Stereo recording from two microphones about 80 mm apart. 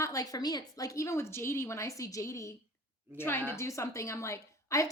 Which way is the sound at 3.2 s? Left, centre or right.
Left.